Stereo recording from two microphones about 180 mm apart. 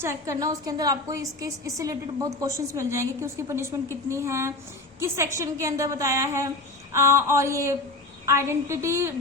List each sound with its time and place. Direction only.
0.0 s a woman's voice: 15° right (ahead or behind)